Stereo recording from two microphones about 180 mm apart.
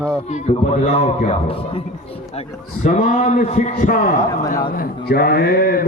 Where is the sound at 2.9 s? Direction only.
50° left (ahead or behind).